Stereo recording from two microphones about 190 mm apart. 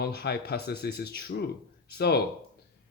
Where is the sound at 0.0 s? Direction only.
60° left (ahead or behind).